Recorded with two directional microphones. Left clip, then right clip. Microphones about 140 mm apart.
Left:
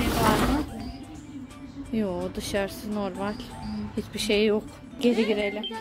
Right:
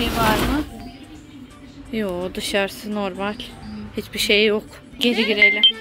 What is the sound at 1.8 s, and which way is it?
Speech, centre (ahead or behind).